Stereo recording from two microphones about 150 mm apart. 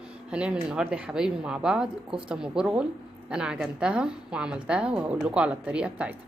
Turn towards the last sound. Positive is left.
turn(degrees=-10)  # may be behind; listen again after turning